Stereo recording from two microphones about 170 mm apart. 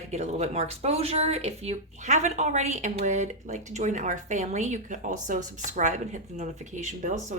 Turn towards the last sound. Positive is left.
turn(degrees=-45)  # may be behind; listen again after turning